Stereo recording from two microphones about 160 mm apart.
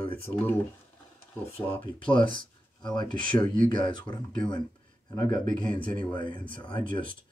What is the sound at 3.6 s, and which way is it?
Speech, 25° left (ahead or behind).